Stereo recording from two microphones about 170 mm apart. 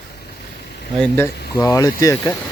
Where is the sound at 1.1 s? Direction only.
15° left (ahead or behind).